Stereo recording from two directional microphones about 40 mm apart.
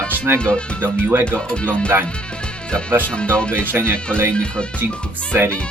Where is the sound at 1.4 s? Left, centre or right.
Left.